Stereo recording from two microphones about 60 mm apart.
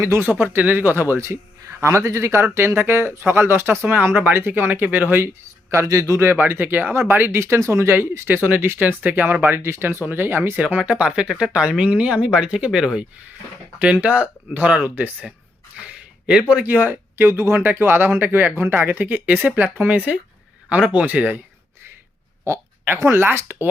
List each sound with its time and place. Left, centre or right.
0.2 s speech: right
5.8 s a man's voice: right
6.5 s speech: right
7.3 s speech: right
9.6 s speech: right
10.0 s speech: right
10.6 s speech: right
13.7 s speech: right
15.8 s a sound: centre
16.5 s speech: right
23.0 s speech: right